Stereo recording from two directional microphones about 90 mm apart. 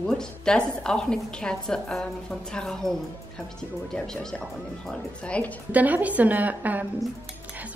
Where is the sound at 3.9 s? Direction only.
10° left (ahead or behind).